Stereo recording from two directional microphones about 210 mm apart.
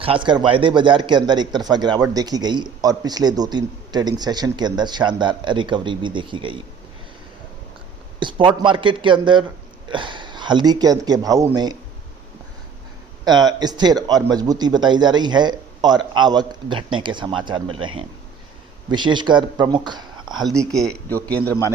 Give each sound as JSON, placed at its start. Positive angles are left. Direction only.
{"t": 0.0, "sound": "a man's voice", "side_deg": -25}
{"t": 8.2, "sound": "a man's voice", "side_deg": -25}
{"t": 13.2, "sound": "a man's voice", "side_deg": -20}
{"t": 20.7, "sound": "a man's voice", "side_deg": 0}